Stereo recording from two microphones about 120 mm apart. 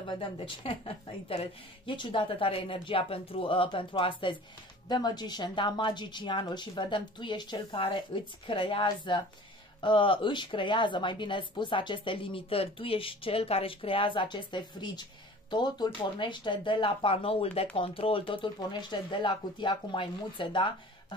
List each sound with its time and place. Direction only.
0.0 s a woman's voice: 45° left (ahead or behind)